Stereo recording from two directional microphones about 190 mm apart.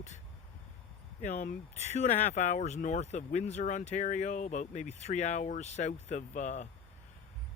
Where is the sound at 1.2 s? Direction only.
40° left (ahead or behind).